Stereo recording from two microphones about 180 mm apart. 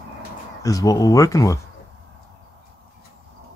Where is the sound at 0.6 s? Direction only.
20° left (ahead or behind).